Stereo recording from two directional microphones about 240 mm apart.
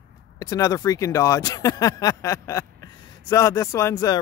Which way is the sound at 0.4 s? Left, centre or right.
Centre.